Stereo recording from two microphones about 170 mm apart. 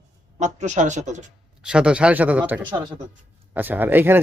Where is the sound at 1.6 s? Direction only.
5° right (ahead or behind).